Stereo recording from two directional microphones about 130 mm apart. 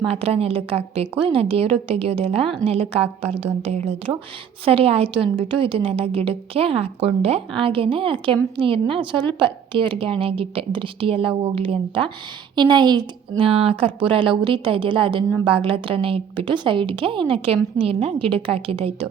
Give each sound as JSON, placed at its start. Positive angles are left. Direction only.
{"t": 0.0, "sound": "a woman's voice", "side_deg": -50}